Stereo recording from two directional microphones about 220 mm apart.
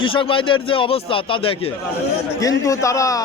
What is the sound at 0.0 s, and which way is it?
A man's voice, 25° left (ahead or behind).